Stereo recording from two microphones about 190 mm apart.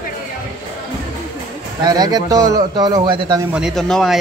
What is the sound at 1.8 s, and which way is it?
A man's voice, 20° right (ahead or behind).